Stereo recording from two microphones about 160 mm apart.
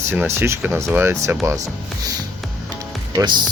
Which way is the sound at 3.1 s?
25° right (ahead or behind).